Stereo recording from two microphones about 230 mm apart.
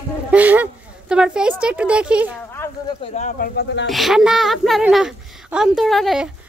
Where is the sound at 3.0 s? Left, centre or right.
Left.